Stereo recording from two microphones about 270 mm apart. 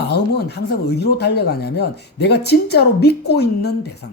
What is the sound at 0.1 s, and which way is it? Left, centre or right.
Speech, left.